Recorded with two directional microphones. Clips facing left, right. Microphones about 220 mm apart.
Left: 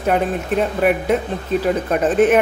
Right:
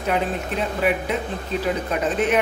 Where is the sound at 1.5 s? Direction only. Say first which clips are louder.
Left 6 dB; 50° left (ahead or behind).